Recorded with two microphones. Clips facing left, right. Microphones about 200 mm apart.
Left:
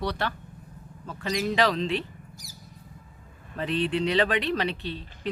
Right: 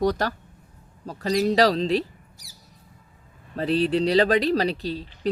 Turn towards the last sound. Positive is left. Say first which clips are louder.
# right 6 dB
turn(degrees=-35)  # may be behind; listen again after turning